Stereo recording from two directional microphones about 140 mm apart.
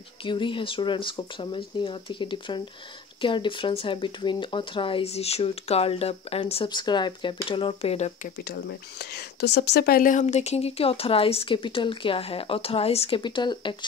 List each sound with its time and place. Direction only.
0.2 s speech: 35° left (ahead or behind)
9.8 s speech: 80° left
10.2 s speech: 50° left (ahead or behind)
13.2 s speech: 35° left (ahead or behind)